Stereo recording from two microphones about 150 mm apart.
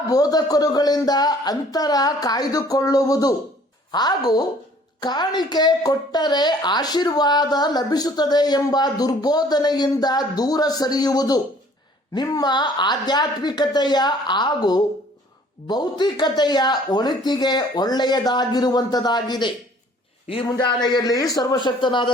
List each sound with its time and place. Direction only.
0.1 s a woman's voice: 25° left (ahead or behind)